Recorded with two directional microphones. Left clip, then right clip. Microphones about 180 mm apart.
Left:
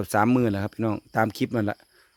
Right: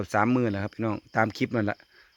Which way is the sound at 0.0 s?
20° left (ahead or behind).